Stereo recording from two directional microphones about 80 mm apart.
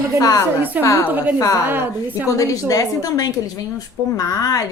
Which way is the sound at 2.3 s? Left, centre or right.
Left.